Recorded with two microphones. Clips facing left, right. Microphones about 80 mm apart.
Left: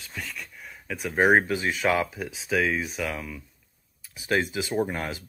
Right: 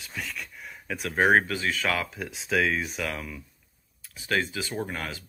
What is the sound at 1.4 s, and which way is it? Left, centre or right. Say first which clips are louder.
Speech: left 3 dB; centre.